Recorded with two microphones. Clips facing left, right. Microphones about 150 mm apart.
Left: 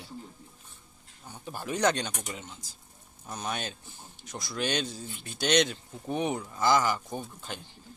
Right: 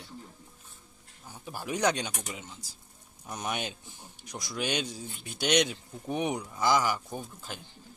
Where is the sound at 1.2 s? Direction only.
5° right (ahead or behind).